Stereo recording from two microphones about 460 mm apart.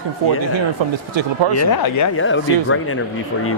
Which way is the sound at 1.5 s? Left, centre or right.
Left.